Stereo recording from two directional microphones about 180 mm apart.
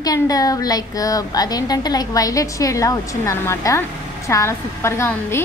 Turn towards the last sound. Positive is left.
turn(degrees=15)  # may be behind; listen again after turning